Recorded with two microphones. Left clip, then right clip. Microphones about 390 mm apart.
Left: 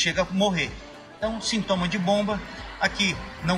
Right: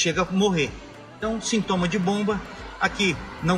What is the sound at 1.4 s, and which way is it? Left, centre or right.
Speech, centre.